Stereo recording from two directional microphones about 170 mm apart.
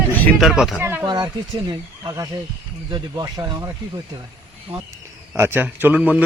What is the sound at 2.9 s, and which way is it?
Speech, 25° right (ahead or behind).